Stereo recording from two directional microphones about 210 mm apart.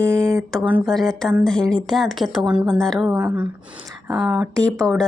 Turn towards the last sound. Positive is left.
turn(degrees=0)  # may be behind; listen again after turning